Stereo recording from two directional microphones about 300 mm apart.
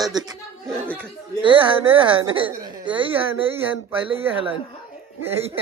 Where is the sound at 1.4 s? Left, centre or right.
Centre.